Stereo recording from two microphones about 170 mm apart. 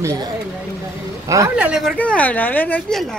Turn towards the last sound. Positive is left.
turn(degrees=5)  # may be behind; listen again after turning